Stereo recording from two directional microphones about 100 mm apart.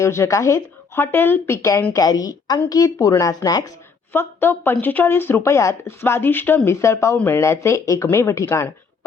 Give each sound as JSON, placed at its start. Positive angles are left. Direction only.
{"t": 0.0, "sound": "speech", "side_deg": 30}
{"t": 1.9, "sound": "speech", "side_deg": 40}
{"t": 4.1, "sound": "speech", "side_deg": 20}